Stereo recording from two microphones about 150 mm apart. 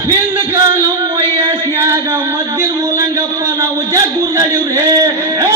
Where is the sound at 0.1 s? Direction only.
20° right (ahead or behind).